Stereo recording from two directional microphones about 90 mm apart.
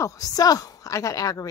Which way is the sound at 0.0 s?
40° left (ahead or behind).